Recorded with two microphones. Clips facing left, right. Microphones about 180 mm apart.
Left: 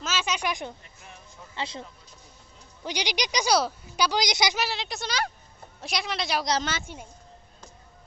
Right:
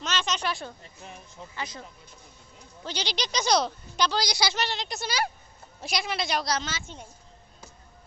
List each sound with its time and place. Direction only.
0.0 s a sound: 5° left (ahead or behind)
1.5 s speech: 25° left (ahead or behind)
2.8 s a woman's voice: 15° left (ahead or behind)
4.6 s speech: 5° left (ahead or behind)
6.9 s a woman's voice: 10° left (ahead or behind)